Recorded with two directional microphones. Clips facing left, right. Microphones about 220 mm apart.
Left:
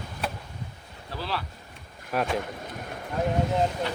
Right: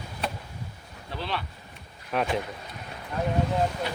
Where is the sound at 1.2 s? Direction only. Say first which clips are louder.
Even; centre (ahead or behind).